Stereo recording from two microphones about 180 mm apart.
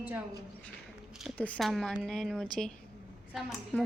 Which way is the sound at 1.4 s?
5° left (ahead or behind).